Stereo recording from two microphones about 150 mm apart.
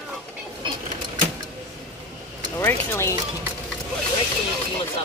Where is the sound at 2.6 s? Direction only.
20° left (ahead or behind).